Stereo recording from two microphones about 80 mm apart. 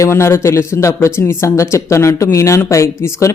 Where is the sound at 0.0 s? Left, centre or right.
Left.